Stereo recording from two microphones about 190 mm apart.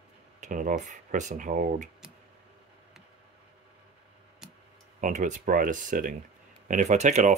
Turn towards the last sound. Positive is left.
turn(degrees=-40)  # may be behind; listen again after turning